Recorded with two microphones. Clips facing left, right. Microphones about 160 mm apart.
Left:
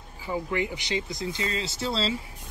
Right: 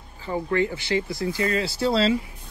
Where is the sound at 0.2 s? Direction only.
10° left (ahead or behind).